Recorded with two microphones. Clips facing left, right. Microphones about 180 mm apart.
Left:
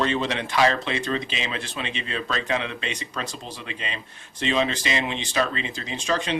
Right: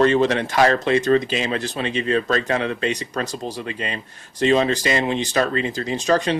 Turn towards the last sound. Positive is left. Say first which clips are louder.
# right 7 dB
turn(degrees=-40)  # may be behind; listen again after turning